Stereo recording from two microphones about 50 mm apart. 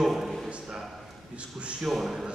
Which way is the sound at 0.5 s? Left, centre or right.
Centre.